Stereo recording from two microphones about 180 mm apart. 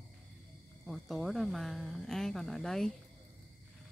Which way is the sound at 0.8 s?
Centre (ahead or behind).